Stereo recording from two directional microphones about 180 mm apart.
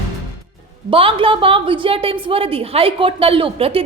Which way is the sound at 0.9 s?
30° right (ahead or behind).